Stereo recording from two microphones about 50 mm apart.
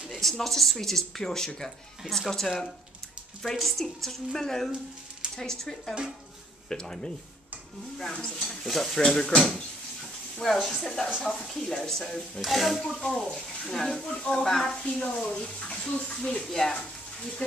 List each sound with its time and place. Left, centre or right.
0.1 s speech: centre
3.5 s speech: centre
13.0 s speech: centre
15.0 s speech: left
17.4 s speech: left